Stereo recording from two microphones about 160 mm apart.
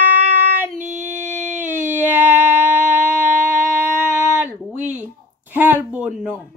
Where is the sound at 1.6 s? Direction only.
10° right (ahead or behind).